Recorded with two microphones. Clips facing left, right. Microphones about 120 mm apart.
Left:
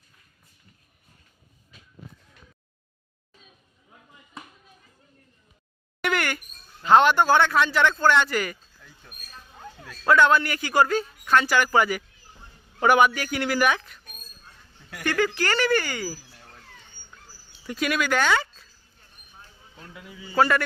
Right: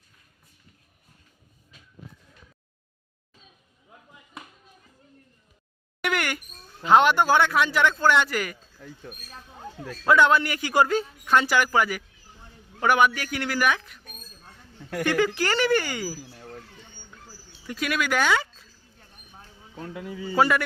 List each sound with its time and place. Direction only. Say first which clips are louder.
6.0 s a sound: left 1 dB; 10° right (ahead or behind)
6.8 s a man's voice: left 1 dB; 10° right (ahead or behind)
10.1 s a man's voice: even; 15° right (ahead or behind)
11.7 s a man's voice: left 2 dB; centre (ahead or behind)
15.0 s a man's voice: right 1 dB; 15° right (ahead or behind)
17.7 s a man's voice: left 2 dB; centre (ahead or behind)
18.9 s a sound: right 2 dB; 65° right (ahead or behind)
19.9 s a man's voice: right 9 dB; 45° right (ahead or behind)
20.3 s a man's voice: even; 10° right (ahead or behind)